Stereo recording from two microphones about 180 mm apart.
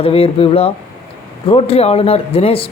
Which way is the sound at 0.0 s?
30° left (ahead or behind).